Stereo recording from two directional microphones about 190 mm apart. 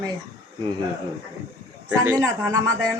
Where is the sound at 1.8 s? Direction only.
10° right (ahead or behind).